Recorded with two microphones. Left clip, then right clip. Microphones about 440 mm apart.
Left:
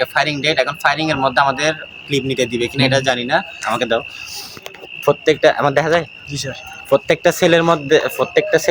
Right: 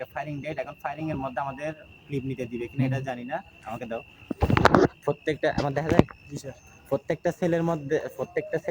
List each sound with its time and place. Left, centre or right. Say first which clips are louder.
0.0 s a man's voice: left 18 dB; right
5.0 s a man's voice: left 14 dB; right
6.9 s a man's voice: left 13 dB; right